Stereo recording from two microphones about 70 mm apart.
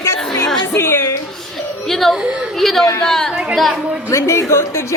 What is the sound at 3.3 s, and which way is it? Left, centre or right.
Speech, centre.